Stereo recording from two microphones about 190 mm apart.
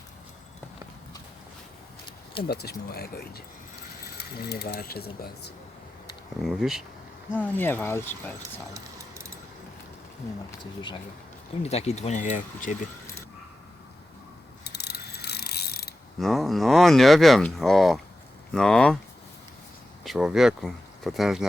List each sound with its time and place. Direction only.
2.5 s speech: 60° left (ahead or behind)
6.4 s speech: centre (ahead or behind)
7.3 s speech: 10° left (ahead or behind)
8.7 s a sound: 15° right (ahead or behind)
10.6 s speech: 25° left (ahead or behind)
14.6 s pulleys: 60° left (ahead or behind)
16.2 s speech: centre (ahead or behind)
20.1 s speech: centre (ahead or behind)